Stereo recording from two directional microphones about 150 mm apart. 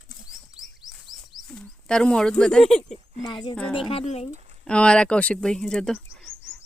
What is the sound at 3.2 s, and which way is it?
Speech, 30° left (ahead or behind).